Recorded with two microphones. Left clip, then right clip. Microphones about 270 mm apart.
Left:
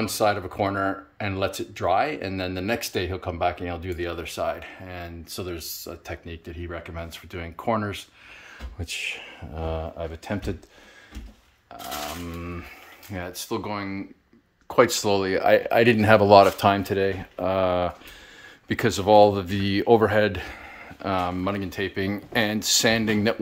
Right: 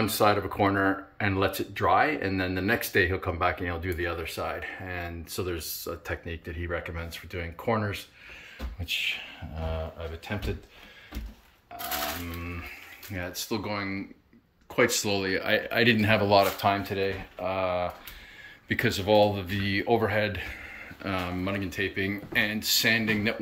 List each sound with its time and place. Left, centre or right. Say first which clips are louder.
0.2 s speech: left 1 dB; centre
9.7 s speech: left 5 dB; left
13.1 s speech: left 2 dB; centre
15.0 s speech: left 7 dB; centre; by 17.9 s left
18.7 s speech: left 5 dB; centre
20.5 s speech: left 1 dB; centre